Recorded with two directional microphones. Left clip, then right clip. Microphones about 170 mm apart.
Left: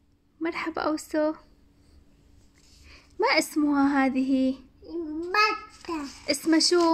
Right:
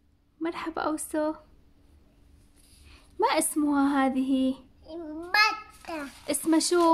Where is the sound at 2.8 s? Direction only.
10° right (ahead or behind).